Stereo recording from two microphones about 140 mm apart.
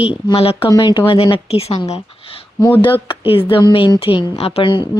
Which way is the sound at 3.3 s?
40° left (ahead or behind).